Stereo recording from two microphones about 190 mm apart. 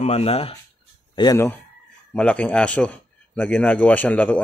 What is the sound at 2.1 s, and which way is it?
A man's voice, 5° left (ahead or behind).